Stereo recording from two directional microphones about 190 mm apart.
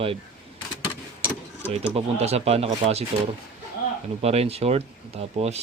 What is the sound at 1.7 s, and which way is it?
Speech, 35° right (ahead or behind).